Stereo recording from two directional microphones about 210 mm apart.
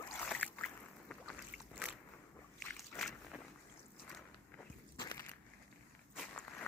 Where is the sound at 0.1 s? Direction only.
10° left (ahead or behind).